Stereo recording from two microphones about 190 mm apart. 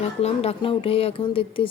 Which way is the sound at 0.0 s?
35° left (ahead or behind).